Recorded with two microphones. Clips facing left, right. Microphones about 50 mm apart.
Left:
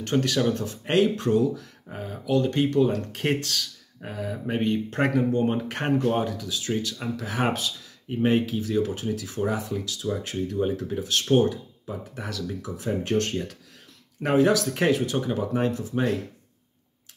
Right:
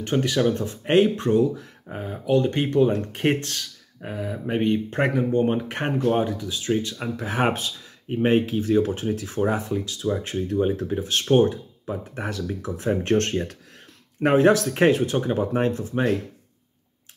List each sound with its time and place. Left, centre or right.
0.1 s speech: centre
4.0 s speech: centre; by 16.0 s right